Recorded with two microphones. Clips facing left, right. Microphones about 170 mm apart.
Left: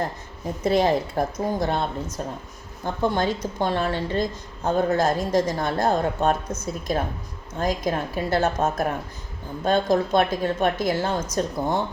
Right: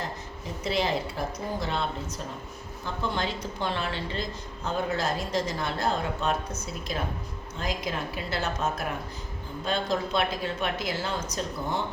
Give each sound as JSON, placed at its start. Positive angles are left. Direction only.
{"t": 0.4, "sound": "a woman's voice", "side_deg": 45}
{"t": 2.8, "sound": "a woman's voice", "side_deg": 50}